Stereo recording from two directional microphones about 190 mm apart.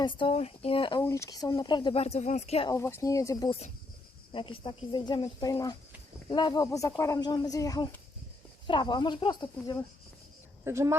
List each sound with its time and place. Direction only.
0.0 s speech: 25° left (ahead or behind)
1.0 s speech: 15° left (ahead or behind); by 2.6 s 35° left (ahead or behind)
2.6 s speech: 15° left (ahead or behind)
10.6 s speech: 15° right (ahead or behind)